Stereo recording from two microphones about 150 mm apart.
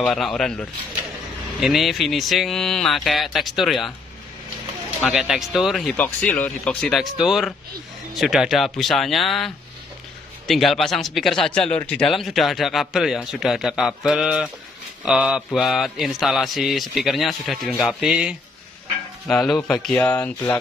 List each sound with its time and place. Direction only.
0.0 s speech: 5° left (ahead or behind)
5.0 s speech: 5° right (ahead or behind)
6.0 s speech: 10° left (ahead or behind)